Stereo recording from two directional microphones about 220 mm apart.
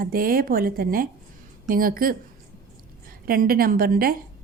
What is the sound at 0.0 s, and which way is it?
A woman's voice, 40° right (ahead or behind).